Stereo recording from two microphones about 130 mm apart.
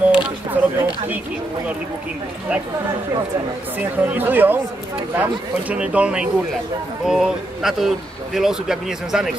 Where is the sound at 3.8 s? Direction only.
15° right (ahead or behind).